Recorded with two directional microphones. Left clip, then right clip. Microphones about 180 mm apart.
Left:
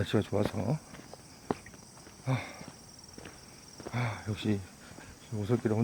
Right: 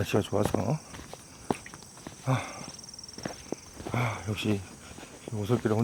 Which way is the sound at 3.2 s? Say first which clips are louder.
Right 11 dB; 70° right (ahead or behind).